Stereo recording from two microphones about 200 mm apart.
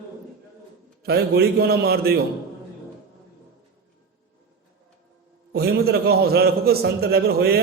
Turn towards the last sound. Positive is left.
turn(degrees=-50)  # may be behind; listen again after turning